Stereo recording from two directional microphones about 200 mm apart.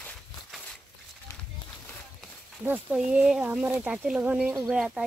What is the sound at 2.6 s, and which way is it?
Speech, 5° right (ahead or behind).